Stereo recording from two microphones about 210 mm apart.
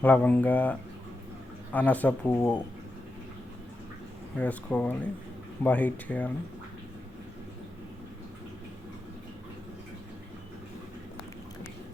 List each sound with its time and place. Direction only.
0.0 s speech: 5° left (ahead or behind)
4.4 s speech: 5° left (ahead or behind)